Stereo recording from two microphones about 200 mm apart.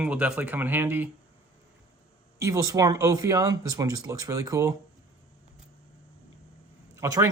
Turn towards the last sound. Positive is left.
turn(degrees=-15)  # may be behind; listen again after turning